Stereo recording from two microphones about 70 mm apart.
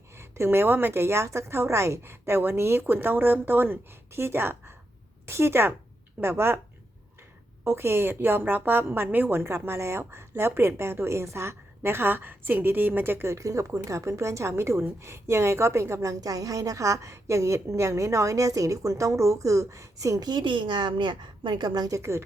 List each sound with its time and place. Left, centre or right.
0.1 s a woman's voice: right
7.6 s a woman's voice: right
9.4 s a woman's voice: right
13.3 s a woman's voice: right
21.9 s a woman's voice: right